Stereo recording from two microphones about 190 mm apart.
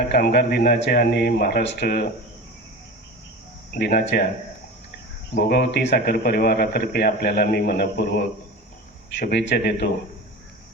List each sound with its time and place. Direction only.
0.1 s speech: 60° left (ahead or behind)
3.8 s speech: 60° left (ahead or behind)
5.3 s speech: 55° left (ahead or behind)